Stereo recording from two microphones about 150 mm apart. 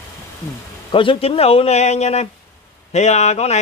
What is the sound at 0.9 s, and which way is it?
Speech, 35° left (ahead or behind).